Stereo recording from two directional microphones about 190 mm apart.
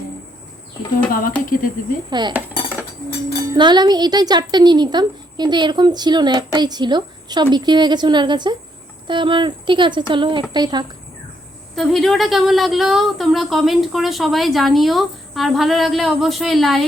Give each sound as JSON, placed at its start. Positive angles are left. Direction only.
{"t": 1.5, "sound": "speech", "side_deg": 45}
{"t": 2.0, "sound": "speech", "side_deg": -25}
{"t": 11.7, "sound": "speech", "side_deg": 0}